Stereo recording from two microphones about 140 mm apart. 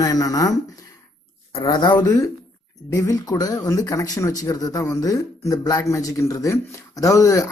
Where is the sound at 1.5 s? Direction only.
35° left (ahead or behind).